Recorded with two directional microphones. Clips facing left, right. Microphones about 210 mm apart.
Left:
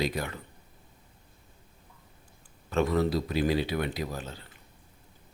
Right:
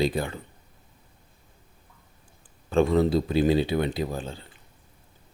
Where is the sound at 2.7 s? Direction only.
30° right (ahead or behind).